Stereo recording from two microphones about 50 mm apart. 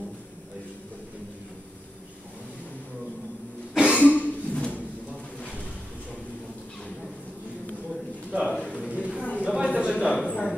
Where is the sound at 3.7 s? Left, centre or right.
Right.